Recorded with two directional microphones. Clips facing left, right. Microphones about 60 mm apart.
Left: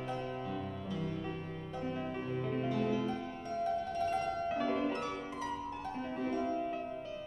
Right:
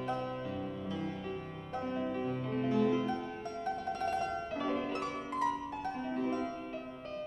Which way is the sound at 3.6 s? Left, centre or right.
Right.